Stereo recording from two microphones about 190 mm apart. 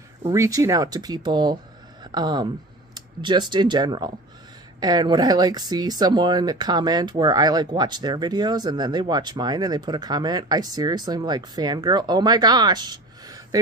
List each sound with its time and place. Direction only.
0.2 s speech: 15° right (ahead or behind)